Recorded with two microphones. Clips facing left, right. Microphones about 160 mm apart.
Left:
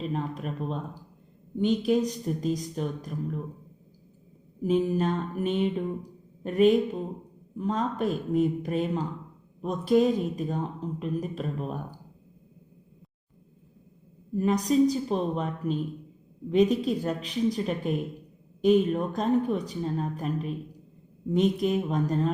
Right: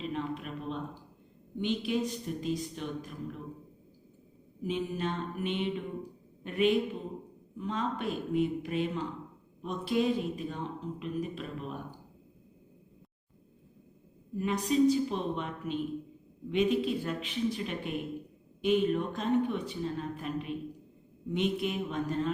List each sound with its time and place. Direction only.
0.0 s a sound: 40° left (ahead or behind)
1.5 s a man's voice: 40° left (ahead or behind)
4.6 s a man's voice: 40° left (ahead or behind)
14.3 s a man's voice: 40° left (ahead or behind)